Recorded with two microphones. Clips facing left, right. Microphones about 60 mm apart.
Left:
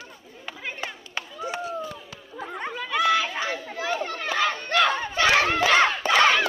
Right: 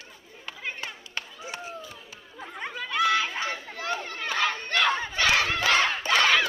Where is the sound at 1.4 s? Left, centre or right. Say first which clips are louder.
Left 7 dB; left.